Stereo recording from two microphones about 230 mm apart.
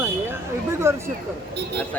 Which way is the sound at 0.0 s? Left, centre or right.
Centre.